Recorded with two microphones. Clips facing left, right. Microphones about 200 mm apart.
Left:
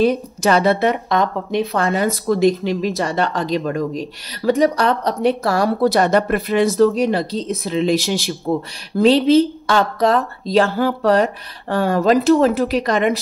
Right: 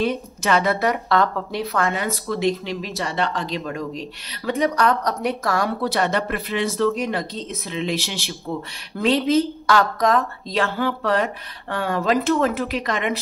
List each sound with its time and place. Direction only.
0.0 s a woman's voice: 35° left (ahead or behind)
1.9 s speech: 40° left (ahead or behind)